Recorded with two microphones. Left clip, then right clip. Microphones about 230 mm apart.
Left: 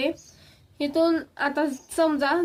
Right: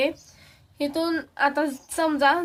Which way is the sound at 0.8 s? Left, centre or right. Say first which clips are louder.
Left 3 dB; right.